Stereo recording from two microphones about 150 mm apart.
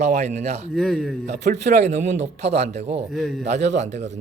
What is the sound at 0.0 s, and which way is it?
Speech, 50° right (ahead or behind).